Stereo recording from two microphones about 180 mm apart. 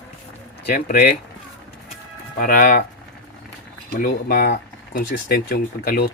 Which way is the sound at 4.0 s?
55° left (ahead or behind).